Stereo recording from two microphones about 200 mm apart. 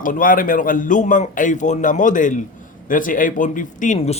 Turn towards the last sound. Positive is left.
turn(degrees=35)  # may be behind; listen again after turning